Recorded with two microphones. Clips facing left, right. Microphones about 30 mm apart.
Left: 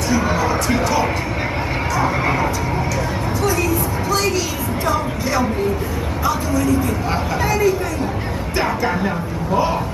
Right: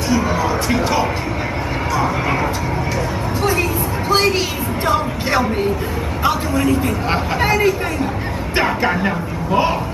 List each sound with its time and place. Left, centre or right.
0.4 s speech: centre
4.1 s a sound: right
6.2 s speech: right